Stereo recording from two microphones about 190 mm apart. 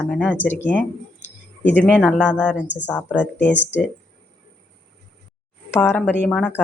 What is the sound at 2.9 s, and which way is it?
Speech, 10° left (ahead or behind).